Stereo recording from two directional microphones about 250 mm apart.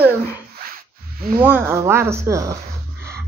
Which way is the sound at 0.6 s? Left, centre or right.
Right.